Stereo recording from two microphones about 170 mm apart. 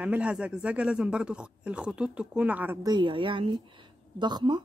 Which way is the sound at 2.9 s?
30° right (ahead or behind).